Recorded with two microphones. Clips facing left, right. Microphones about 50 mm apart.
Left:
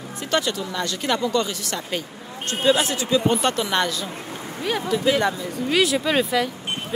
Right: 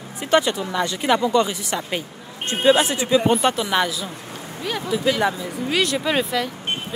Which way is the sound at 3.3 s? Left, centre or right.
Centre.